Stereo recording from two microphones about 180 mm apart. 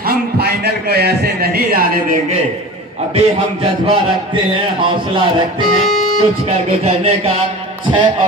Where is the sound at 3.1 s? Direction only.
35° right (ahead or behind).